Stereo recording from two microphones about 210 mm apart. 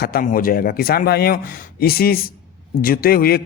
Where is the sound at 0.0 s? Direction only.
45° left (ahead or behind).